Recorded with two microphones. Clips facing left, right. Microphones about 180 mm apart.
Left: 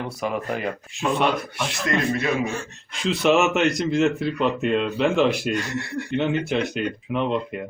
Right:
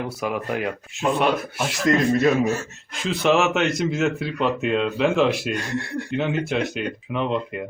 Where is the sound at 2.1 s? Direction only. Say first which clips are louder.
Right 5 dB; 40° right (ahead or behind).